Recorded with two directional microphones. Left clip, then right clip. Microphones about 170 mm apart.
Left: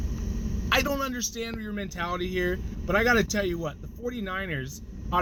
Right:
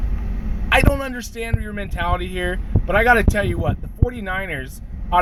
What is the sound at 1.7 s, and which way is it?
Speech, 20° left (ahead or behind).